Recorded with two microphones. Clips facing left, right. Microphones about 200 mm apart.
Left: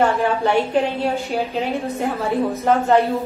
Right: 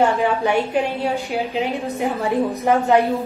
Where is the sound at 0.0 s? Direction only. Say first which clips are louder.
Even; 15° right (ahead or behind).